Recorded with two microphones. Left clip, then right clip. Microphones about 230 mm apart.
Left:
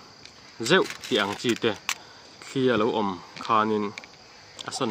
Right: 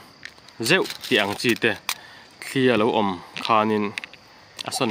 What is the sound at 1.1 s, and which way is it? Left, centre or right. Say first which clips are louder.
Speech: right 5 dB; right.